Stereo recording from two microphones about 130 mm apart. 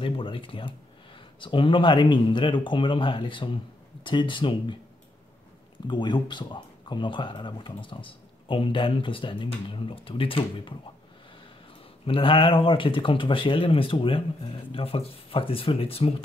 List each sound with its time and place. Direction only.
0.0 s speech: 40° left (ahead or behind)
5.9 s speech: 35° left (ahead or behind)
12.1 s speech: 45° left (ahead or behind)